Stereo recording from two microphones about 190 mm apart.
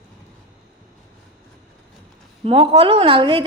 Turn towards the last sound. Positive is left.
turn(degrees=-25)  # may be behind; listen again after turning